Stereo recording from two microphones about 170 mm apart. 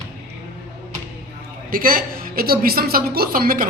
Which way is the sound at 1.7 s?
55° right (ahead or behind).